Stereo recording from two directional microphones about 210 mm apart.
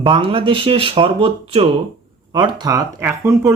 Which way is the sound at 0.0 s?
25° right (ahead or behind).